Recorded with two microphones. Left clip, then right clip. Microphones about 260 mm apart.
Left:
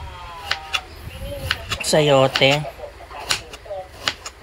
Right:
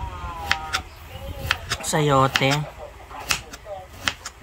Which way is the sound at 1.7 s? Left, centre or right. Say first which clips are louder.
Left 6 dB; right.